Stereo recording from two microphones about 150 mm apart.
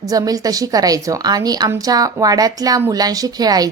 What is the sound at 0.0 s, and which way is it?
A woman's voice, 25° right (ahead or behind).